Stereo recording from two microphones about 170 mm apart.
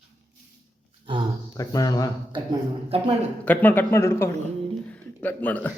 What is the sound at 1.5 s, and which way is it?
Speech, 20° left (ahead or behind).